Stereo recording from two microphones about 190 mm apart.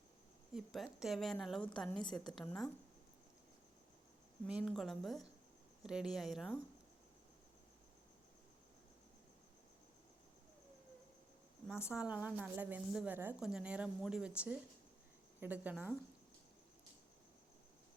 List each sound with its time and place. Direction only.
0.5 s a woman's voice: centre (ahead or behind)
1.9 s a woman's voice: 25° left (ahead or behind)
2.1 s a woman's voice: centre (ahead or behind)
4.4 s a woman's voice: centre (ahead or behind)
11.9 s a woman's voice: 5° right (ahead or behind)